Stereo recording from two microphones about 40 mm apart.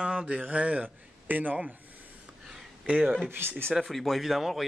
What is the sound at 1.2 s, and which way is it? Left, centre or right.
Speech, right.